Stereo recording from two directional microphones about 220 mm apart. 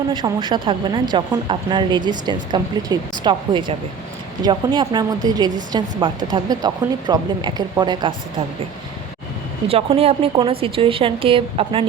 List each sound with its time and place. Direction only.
0.1 s speech: 20° right (ahead or behind)
9.6 s speech: 25° right (ahead or behind)